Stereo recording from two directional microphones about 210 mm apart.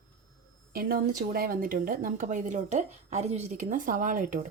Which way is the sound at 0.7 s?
45° right (ahead or behind).